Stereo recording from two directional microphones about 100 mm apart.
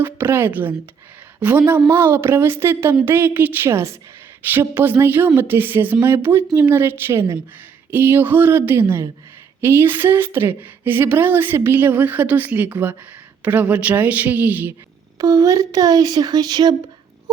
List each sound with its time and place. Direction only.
0.0 s a woman's voice: 20° right (ahead or behind)
15.2 s speech: 35° right (ahead or behind)